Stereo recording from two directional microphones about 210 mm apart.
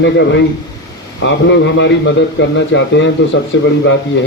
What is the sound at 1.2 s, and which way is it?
A man's voice, 55° left (ahead or behind).